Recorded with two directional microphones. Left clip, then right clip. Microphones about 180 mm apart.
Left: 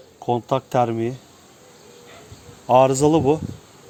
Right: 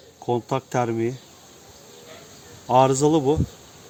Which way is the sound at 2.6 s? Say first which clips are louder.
Left 3 dB; 40° left (ahead or behind).